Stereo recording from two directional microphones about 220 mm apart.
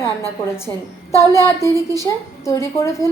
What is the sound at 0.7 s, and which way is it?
A woman's voice, 15° left (ahead or behind).